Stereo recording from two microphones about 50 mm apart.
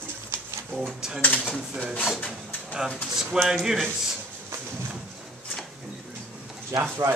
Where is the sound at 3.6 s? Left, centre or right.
Centre.